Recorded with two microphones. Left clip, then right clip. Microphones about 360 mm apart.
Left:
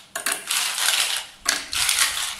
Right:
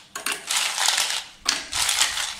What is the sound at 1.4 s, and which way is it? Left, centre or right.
Mechanisms, centre.